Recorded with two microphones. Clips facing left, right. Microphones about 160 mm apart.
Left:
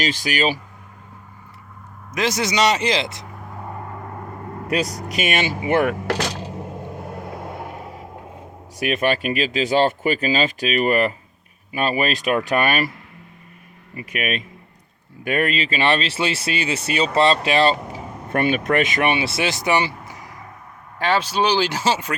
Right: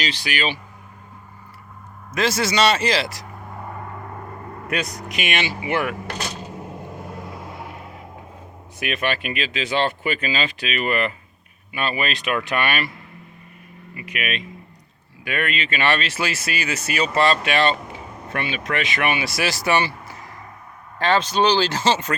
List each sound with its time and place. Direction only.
0.0 s speech: 45° left (ahead or behind)
2.1 s speech: 15° left (ahead or behind)
4.7 s speech: 35° left (ahead or behind)
8.8 s speech: 40° left (ahead or behind)
13.9 s speech: 40° left (ahead or behind); by 22.1 s 10° left (ahead or behind)